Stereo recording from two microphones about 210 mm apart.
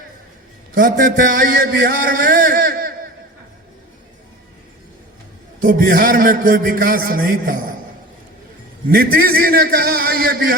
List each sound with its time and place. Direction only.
0.7 s a man's voice: 40° right (ahead or behind)
5.6 s a man's voice: 45° right (ahead or behind)
8.9 s a man's voice: 45° right (ahead or behind)